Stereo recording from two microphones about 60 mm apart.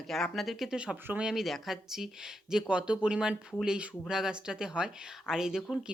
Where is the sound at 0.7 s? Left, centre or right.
Centre.